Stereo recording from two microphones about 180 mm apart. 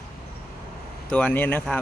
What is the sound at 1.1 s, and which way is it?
Speech, 5° left (ahead or behind).